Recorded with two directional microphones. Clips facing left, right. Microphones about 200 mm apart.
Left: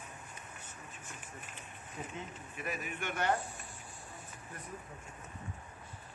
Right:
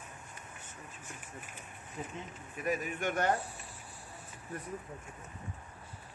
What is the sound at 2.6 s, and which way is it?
Speech, 40° right (ahead or behind).